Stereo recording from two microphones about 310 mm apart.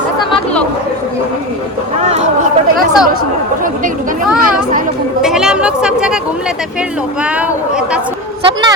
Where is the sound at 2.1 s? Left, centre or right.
Right.